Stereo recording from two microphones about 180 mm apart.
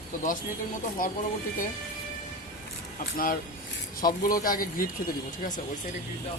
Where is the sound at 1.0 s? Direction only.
50° left (ahead or behind).